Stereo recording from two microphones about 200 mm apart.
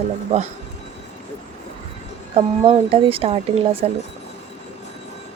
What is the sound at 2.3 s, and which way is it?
Speech, 30° right (ahead or behind).